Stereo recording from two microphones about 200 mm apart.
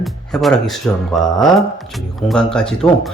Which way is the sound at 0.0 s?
Centre (ahead or behind).